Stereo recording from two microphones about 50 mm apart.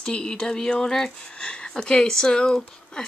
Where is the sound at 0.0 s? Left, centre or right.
Centre.